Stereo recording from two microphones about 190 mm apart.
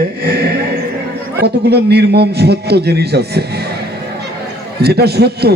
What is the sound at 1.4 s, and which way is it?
A man's voice, 60° right (ahead or behind).